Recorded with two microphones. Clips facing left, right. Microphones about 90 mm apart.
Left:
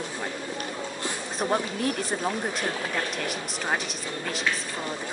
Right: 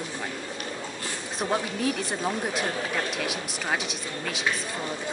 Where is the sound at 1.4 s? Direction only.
5° left (ahead or behind).